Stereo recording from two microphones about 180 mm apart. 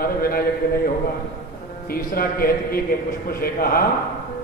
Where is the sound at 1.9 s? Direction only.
55° left (ahead or behind).